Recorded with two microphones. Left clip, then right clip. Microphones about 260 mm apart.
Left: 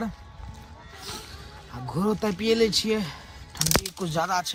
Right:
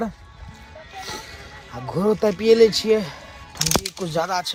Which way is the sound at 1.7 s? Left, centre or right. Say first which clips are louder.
Right 7 dB; centre.